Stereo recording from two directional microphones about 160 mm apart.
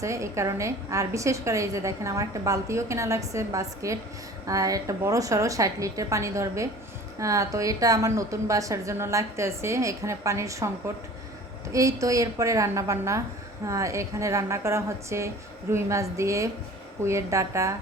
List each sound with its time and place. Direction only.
0.0 s a woman's voice: 20° right (ahead or behind)
11.7 s a woman's voice: 20° right (ahead or behind)